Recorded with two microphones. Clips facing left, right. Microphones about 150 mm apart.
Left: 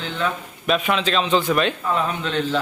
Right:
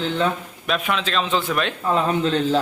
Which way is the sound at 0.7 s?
Centre (ahead or behind).